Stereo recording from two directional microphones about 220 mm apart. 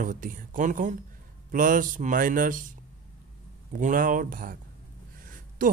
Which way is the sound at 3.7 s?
35° right (ahead or behind).